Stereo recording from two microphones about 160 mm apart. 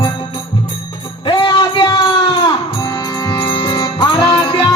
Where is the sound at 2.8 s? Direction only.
25° left (ahead or behind).